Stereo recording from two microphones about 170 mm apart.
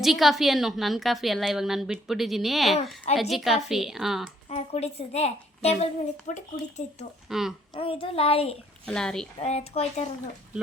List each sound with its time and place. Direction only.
0.0 s a woman's voice: centre (ahead or behind)
4.4 s a woman's voice: 40° left (ahead or behind)
7.3 s speech: centre (ahead or behind)
7.7 s a woman's voice: 30° left (ahead or behind)
8.9 s a woman's voice: 5° left (ahead or behind)
9.4 s a woman's voice: 35° left (ahead or behind)